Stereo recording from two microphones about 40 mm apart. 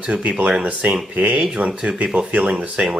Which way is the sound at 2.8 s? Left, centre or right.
Right.